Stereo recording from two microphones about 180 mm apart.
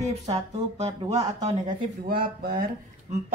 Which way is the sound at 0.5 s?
35° right (ahead or behind).